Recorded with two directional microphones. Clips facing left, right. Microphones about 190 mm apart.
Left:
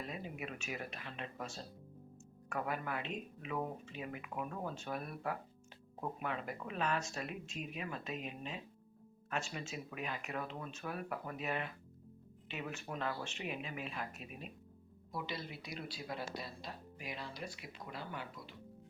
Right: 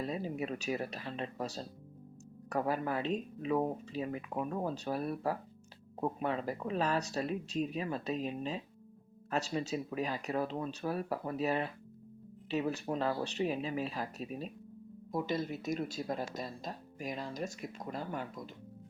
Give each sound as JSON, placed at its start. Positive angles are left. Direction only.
{"t": 0.0, "sound": "speech", "side_deg": -35}
{"t": 15.1, "sound": "speech", "side_deg": -45}